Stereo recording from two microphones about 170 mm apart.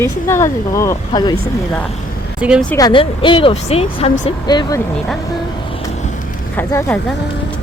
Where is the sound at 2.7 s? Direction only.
25° left (ahead or behind).